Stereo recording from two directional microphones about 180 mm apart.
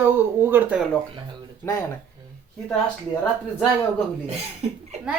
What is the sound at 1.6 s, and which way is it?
Speech, 15° left (ahead or behind).